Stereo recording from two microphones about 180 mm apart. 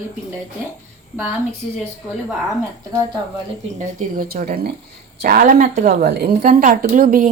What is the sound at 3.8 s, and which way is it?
A woman's voice, 50° right (ahead or behind).